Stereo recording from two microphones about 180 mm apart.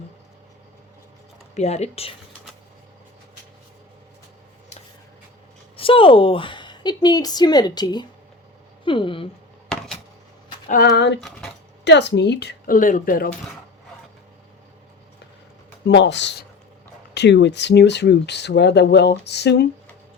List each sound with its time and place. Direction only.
1.5 s speech: 40° left (ahead or behind)
5.7 s a woman's voice: 30° left (ahead or behind)
9.7 s a sound: 5° left (ahead or behind)
10.7 s a woman's voice: 55° left (ahead or behind)
11.2 s a sound: 5° left (ahead or behind)
11.9 s a woman's voice: 70° left (ahead or behind); by 13.3 s 50° left (ahead or behind)
15.9 s speech: 80° left